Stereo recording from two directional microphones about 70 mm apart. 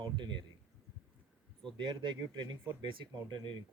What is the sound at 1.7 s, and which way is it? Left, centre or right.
Speech, right.